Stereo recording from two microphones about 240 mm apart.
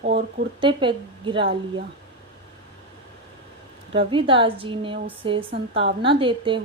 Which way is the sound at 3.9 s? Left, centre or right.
Right.